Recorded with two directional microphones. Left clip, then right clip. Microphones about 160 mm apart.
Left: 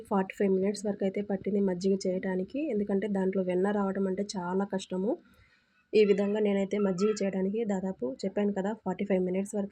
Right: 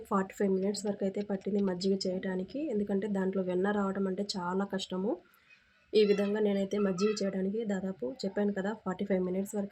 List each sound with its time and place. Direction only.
0.1 s speech: 20° left (ahead or behind)